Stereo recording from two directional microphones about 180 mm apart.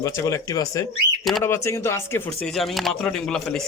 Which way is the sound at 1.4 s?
15° left (ahead or behind).